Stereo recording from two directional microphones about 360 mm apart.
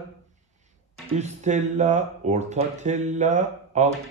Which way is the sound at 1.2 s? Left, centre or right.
Centre.